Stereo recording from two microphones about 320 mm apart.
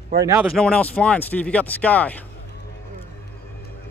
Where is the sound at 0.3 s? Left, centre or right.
Centre.